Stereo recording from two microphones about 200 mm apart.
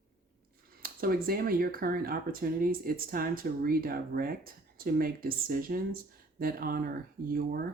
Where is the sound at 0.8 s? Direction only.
45° right (ahead or behind).